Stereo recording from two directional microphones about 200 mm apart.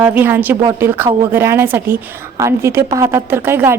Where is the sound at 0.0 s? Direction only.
10° right (ahead or behind).